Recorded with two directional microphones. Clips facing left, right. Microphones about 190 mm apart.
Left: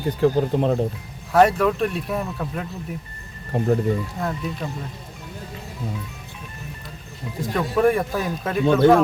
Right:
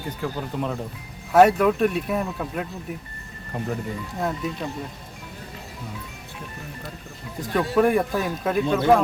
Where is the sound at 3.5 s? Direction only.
40° left (ahead or behind).